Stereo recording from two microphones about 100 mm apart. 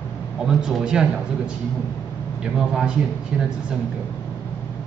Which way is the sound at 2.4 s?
10° right (ahead or behind).